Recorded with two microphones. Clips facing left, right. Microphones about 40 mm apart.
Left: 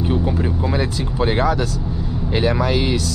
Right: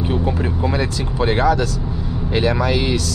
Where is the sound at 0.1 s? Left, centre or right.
Centre.